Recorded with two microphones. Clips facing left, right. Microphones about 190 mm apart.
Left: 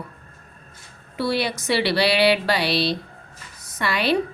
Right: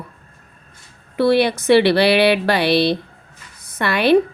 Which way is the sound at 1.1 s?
55° right (ahead or behind).